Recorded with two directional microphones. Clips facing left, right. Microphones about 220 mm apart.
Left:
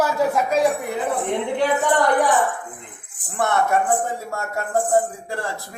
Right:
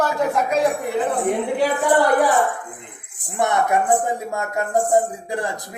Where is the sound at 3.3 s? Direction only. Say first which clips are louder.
Right 1 dB; 15° right (ahead or behind).